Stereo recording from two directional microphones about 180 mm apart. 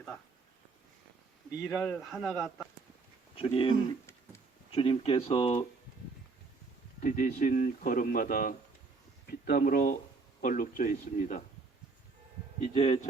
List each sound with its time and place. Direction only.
1.6 s speech: 5° left (ahead or behind)
3.3 s speech: 30° left (ahead or behind)
7.0 s speech: 45° left (ahead or behind)
12.7 s speech: 35° left (ahead or behind)